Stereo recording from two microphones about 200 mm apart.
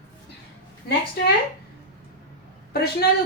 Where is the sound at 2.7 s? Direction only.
50° left (ahead or behind).